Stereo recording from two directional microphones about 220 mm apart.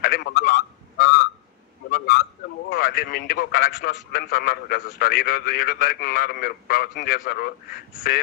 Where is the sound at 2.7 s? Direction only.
45° left (ahead or behind).